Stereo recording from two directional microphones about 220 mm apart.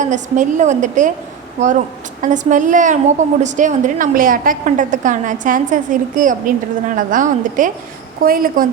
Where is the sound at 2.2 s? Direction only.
35° right (ahead or behind).